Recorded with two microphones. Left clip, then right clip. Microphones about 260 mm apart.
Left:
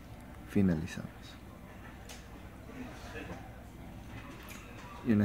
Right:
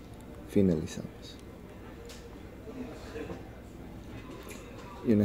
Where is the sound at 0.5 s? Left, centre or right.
Centre.